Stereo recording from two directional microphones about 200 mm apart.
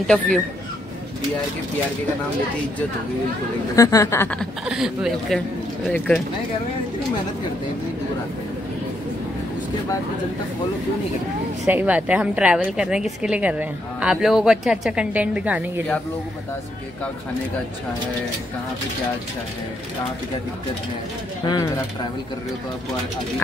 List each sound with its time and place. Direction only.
0.0 s a woman's voice: 5° left (ahead or behind)
3.7 s speech: 15° left (ahead or behind)
4.6 s a woman's voice: 5° right (ahead or behind)
11.6 s a woman's voice: 10° right (ahead or behind)
21.5 s speech: 15° left (ahead or behind)